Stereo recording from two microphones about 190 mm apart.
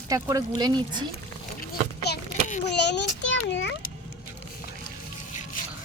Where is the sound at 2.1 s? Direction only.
60° left (ahead or behind).